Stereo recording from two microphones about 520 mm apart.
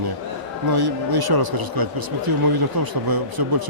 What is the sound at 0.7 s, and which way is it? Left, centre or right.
Speech, right.